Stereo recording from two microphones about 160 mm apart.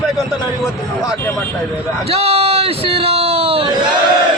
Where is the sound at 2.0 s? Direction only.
40° right (ahead or behind).